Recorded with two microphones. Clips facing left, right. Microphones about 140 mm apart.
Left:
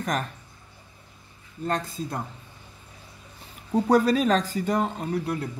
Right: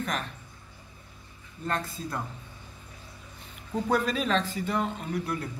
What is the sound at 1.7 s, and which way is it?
Speech, 30° left (ahead or behind).